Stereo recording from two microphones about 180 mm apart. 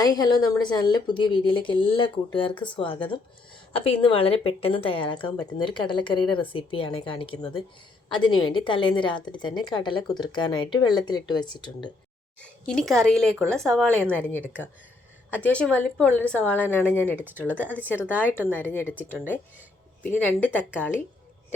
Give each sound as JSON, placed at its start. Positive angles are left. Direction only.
{"t": 0.0, "sound": "a woman's voice", "side_deg": 20}
{"t": 12.4, "sound": "a woman's voice", "side_deg": 5}
{"t": 20.0, "sound": "a woman's voice", "side_deg": 10}